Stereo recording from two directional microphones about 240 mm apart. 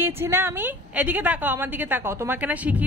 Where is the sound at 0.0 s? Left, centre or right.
Centre.